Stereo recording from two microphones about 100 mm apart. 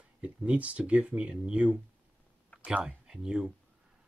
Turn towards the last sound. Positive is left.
turn(degrees=-5)  # may be behind; listen again after turning